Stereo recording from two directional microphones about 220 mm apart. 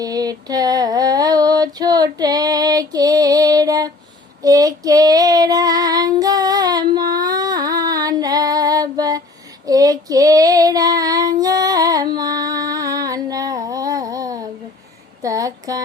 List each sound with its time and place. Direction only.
0.0 s female singing: 15° right (ahead or behind)
4.4 s child singing: 15° right (ahead or behind)
15.2 s a sound: 15° right (ahead or behind)